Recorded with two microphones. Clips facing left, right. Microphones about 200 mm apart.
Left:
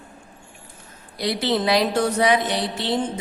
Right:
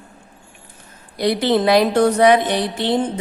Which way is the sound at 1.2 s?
55° right (ahead or behind).